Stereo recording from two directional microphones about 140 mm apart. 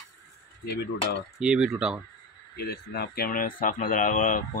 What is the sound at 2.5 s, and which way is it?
Speech, 90° left.